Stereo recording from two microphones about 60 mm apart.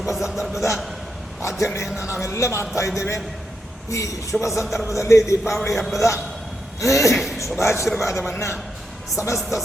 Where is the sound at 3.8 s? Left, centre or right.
Left.